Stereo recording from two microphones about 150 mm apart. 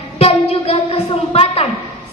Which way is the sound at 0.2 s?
40° left (ahead or behind).